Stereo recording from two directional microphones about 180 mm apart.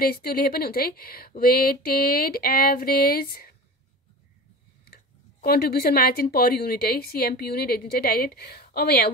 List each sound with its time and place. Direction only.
0.0 s speech: 55° left (ahead or behind)
4.8 s speech: 60° left (ahead or behind)